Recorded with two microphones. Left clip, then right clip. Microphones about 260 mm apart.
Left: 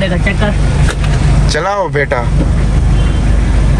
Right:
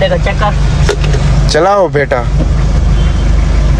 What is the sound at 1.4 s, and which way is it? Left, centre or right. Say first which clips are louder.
Speech: right 6 dB; centre.